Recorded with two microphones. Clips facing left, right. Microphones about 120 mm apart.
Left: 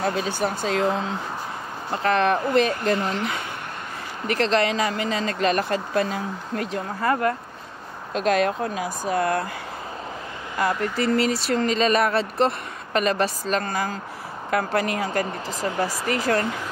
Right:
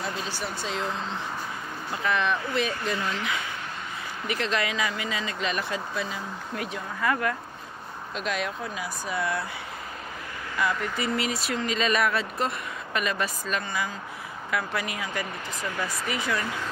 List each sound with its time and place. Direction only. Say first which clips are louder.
0.0 s speech: left 8 dB; 50° left (ahead or behind)
1.9 s speech: left 6 dB; 40° left (ahead or behind)
6.6 s speech: left 4 dB; 35° left (ahead or behind)
10.6 s speech: left 5 dB; 40° left (ahead or behind)